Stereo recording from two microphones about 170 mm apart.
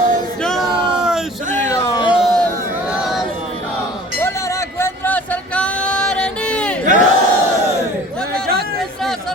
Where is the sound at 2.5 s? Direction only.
10° right (ahead or behind).